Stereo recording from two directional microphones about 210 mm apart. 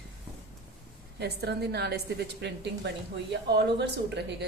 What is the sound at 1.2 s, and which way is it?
A woman's voice, 50° right (ahead or behind).